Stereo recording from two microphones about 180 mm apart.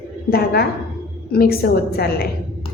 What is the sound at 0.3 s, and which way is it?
A woman's voice, 60° left (ahead or behind).